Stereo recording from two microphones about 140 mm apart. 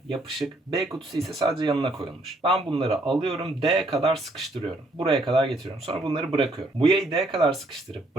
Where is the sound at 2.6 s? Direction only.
45° right (ahead or behind).